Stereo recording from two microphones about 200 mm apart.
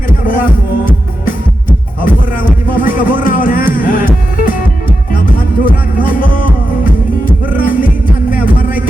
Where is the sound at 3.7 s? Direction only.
45° left (ahead or behind).